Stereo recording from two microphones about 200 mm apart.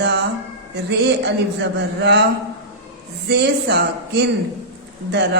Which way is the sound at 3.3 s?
55° right (ahead or behind).